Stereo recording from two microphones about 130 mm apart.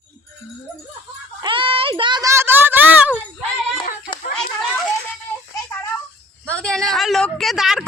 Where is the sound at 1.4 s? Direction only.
40° right (ahead or behind).